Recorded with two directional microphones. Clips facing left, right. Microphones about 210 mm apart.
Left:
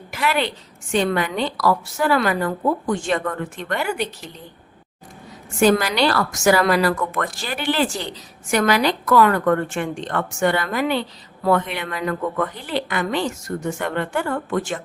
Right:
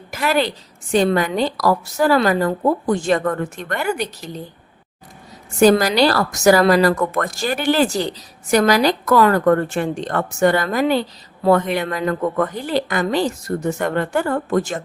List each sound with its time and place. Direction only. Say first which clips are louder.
0.1 s a woman's voice: right 3 dB; 40° right (ahead or behind)
5.5 s a woman's voice: right 4 dB; 40° right (ahead or behind)